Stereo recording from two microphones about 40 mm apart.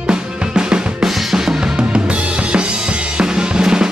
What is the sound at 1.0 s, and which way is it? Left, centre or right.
Drum kit, centre.